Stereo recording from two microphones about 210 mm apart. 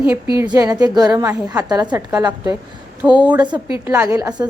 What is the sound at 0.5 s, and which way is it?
A woman's voice, 15° right (ahead or behind).